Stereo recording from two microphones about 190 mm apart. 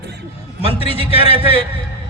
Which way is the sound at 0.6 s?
30° left (ahead or behind).